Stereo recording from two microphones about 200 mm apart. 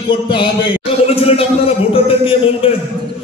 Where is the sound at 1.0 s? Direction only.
30° left (ahead or behind).